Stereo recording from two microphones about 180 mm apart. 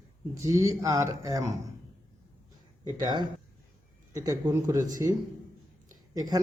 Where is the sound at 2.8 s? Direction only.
25° right (ahead or behind).